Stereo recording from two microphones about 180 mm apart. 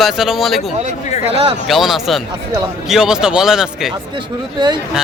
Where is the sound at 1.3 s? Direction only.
35° right (ahead or behind).